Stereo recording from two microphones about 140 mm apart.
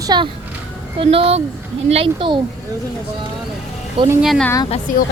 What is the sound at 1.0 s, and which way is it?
A child's voice, 40° right (ahead or behind).